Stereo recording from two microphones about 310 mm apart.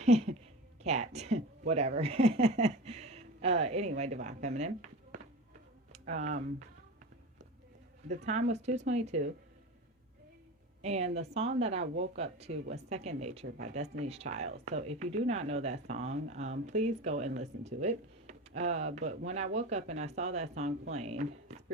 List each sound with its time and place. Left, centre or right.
0.0 s a woman's voice: right
8.0 s speech: right
10.8 s speech: right